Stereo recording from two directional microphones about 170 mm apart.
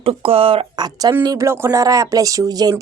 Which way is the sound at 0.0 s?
35° right (ahead or behind).